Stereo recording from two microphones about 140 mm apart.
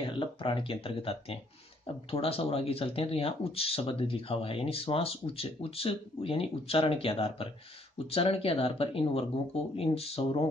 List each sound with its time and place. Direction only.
0.0 s speech: 40° left (ahead or behind)